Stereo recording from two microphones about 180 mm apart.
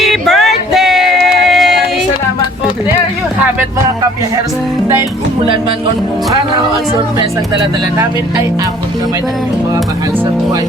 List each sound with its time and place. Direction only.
0.0 s music: centre (ahead or behind)
1.5 s a sound: centre (ahead or behind)
7.2 s speech: 20° right (ahead or behind)